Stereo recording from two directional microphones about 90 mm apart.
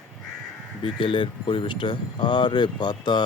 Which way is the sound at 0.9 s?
70° left (ahead or behind).